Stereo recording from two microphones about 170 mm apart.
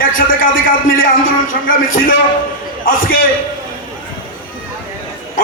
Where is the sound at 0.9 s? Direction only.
55° left (ahead or behind).